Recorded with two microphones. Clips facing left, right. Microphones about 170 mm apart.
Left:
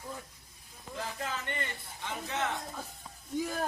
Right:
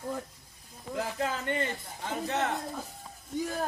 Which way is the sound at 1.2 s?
40° right (ahead or behind).